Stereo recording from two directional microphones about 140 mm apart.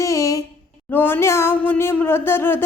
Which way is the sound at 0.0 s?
20° left (ahead or behind).